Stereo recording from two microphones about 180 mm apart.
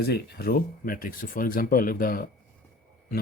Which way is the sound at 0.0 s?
60° left (ahead or behind).